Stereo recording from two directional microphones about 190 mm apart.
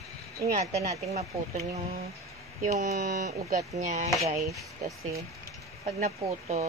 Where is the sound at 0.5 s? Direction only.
40° right (ahead or behind).